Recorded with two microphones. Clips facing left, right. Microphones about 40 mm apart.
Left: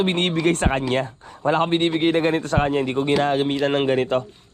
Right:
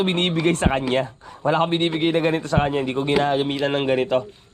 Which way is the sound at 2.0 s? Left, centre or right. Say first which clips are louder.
Left 1 dB; left.